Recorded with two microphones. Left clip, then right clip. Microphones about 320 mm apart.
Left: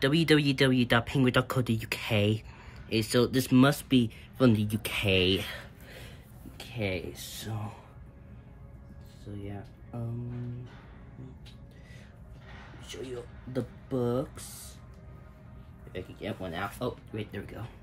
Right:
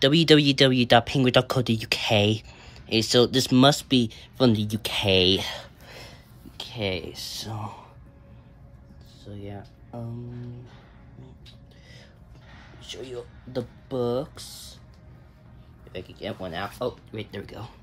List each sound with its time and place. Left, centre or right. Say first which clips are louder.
0.0 s speech: right 7 dB; centre
9.4 s speech: right 4 dB; right
13.5 s speech: right 3 dB; right
15.9 s speech: right 3 dB; right